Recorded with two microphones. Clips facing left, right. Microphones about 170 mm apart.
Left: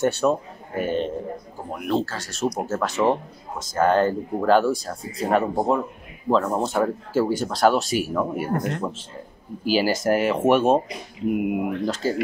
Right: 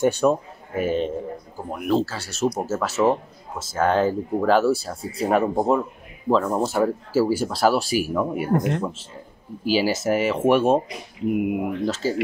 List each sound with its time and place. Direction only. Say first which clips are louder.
0.0 s a man's voice: right 2 dB; 10° right (ahead or behind)
8.5 s speech: right 4 dB; 20° right (ahead or behind)
9.7 s speech: even; 5° right (ahead or behind)